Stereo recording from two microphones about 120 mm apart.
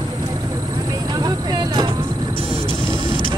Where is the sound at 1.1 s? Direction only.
35° right (ahead or behind).